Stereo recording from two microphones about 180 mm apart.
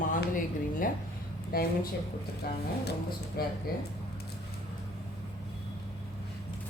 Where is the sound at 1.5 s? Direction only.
55° left (ahead or behind).